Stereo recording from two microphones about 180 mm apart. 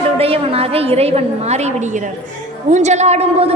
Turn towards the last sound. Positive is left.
turn(degrees=-35)  # may be behind; listen again after turning